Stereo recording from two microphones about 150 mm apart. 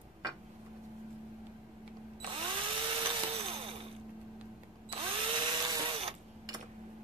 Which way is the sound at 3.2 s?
40° right (ahead or behind).